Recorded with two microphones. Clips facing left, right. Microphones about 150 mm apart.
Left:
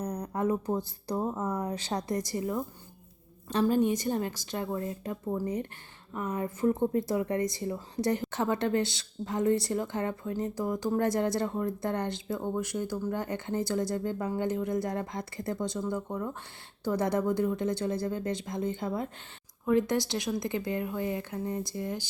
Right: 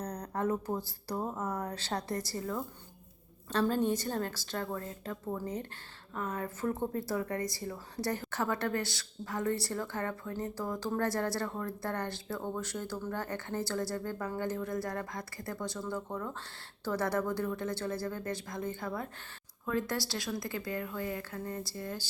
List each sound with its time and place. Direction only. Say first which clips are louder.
0.0 s speech: left 3 dB; 10° left (ahead or behind)